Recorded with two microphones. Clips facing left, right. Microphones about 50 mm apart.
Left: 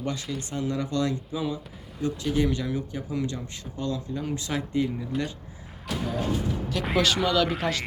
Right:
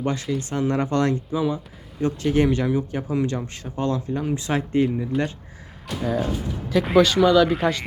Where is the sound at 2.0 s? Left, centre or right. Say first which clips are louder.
Right 5 dB; right.